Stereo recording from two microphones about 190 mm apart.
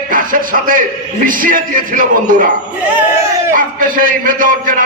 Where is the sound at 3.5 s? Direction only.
45° right (ahead or behind).